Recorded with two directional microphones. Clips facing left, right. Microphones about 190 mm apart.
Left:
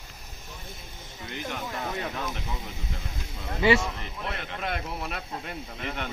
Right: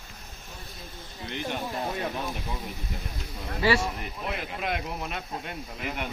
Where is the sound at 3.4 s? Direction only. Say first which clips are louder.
Left 3 dB; 20° left (ahead or behind).